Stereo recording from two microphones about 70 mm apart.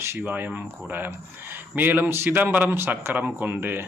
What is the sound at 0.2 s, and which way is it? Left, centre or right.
Speech, right.